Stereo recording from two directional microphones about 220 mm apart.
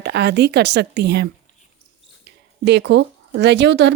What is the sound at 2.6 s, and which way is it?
Speech, 50° right (ahead or behind).